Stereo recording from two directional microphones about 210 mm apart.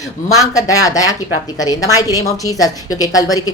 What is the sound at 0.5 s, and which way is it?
A woman's voice, 15° left (ahead or behind).